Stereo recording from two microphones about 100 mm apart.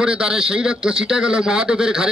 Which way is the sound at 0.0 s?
10° right (ahead or behind).